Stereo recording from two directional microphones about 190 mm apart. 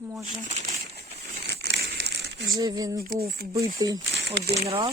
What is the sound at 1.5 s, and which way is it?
Crumpling, 60° right (ahead or behind).